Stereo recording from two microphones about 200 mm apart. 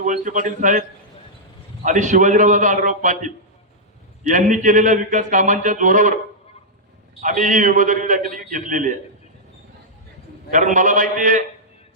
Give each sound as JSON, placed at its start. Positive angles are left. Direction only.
{"t": 0.0, "sound": "speech", "side_deg": -40}
{"t": 7.2, "sound": "speech", "side_deg": -40}
{"t": 10.5, "sound": "speech", "side_deg": -40}